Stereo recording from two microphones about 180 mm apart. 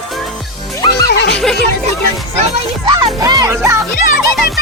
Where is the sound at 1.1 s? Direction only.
70° left (ahead or behind).